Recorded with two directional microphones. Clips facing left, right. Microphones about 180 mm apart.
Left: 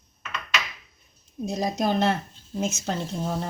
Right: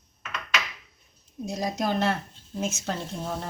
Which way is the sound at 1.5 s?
20° left (ahead or behind).